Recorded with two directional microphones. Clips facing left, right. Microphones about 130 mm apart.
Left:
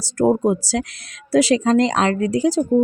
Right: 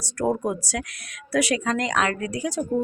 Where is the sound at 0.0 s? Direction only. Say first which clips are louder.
Left 7 dB; 25° left (ahead or behind).